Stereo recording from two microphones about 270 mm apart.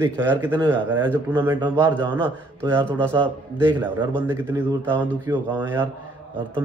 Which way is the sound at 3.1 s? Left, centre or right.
Centre.